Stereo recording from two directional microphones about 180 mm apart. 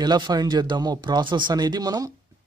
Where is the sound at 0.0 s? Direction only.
25° right (ahead or behind).